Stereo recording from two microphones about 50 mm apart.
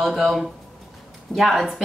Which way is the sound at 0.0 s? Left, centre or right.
Centre.